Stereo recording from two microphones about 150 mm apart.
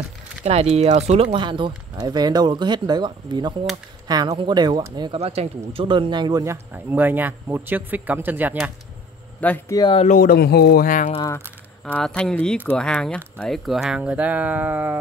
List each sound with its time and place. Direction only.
0.4 s speech: 45° right (ahead or behind); by 5.1 s 30° right (ahead or behind)
5.1 s speech: 45° right (ahead or behind); by 8.7 s 10° right (ahead or behind)
9.4 s speech: 10° left (ahead or behind)
10.0 s speech: 70° left (ahead or behind)
11.8 s speech: 5° left (ahead or behind); by 15.0 s 10° right (ahead or behind)